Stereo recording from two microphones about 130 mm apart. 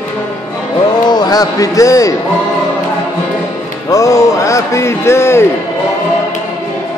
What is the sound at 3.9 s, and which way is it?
A man's voice, 25° left (ahead or behind).